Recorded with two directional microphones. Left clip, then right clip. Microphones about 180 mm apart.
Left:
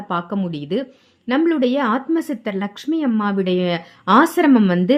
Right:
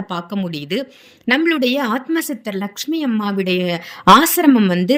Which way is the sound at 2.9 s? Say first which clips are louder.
Left 1 dB; 45° right (ahead or behind).